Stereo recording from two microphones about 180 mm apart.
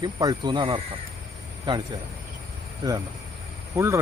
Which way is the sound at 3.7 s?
15° right (ahead or behind).